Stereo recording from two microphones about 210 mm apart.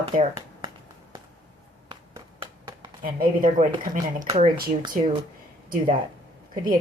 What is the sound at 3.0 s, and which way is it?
A woman's voice, 40° right (ahead or behind).